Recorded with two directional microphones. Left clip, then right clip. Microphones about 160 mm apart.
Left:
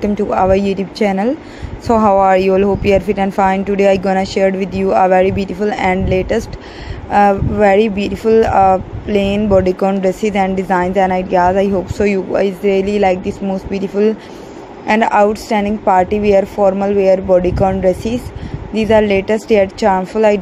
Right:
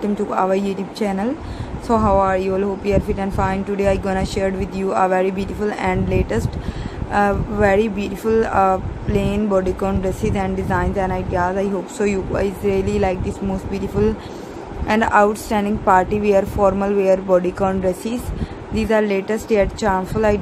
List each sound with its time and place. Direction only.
0.0 s a woman's voice: 25° left (ahead or behind)